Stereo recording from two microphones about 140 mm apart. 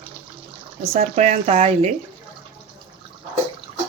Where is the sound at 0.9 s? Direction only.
55° right (ahead or behind).